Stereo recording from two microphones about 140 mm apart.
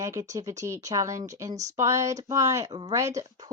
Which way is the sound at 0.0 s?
25° right (ahead or behind).